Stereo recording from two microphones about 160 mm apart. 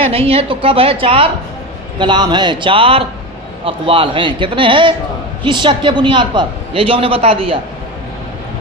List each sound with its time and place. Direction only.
0.0 s a woman's voice: 35° right (ahead or behind)